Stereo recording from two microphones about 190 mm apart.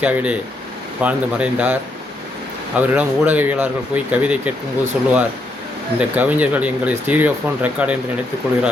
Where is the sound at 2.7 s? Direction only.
10° right (ahead or behind).